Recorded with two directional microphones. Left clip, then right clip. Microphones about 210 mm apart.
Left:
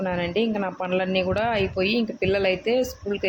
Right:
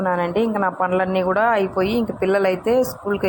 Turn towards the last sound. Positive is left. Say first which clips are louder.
# right 5 dB
turn(degrees=-5)  # may be behind; listen again after turning